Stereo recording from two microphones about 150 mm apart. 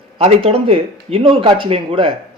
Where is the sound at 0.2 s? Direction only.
40° right (ahead or behind).